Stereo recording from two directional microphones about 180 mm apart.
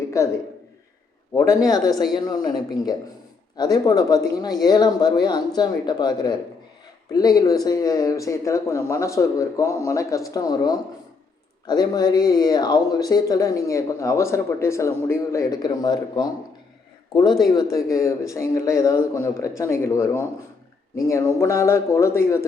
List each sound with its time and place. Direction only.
0.1 s speech: 15° left (ahead or behind)
3.6 s speech: 20° left (ahead or behind)
17.5 s speech: 20° left (ahead or behind)